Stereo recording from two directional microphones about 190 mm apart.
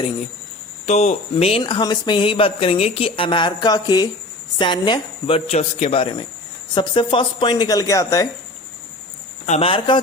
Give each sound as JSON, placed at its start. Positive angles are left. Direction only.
{"t": 0.9, "sound": "speech", "side_deg": 35}
{"t": 9.5, "sound": "speech", "side_deg": 30}